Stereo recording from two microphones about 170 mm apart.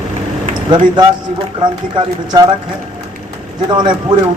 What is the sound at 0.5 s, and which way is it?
A man's voice, 25° right (ahead or behind).